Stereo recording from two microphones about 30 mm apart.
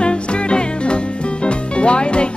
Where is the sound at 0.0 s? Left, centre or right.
Left.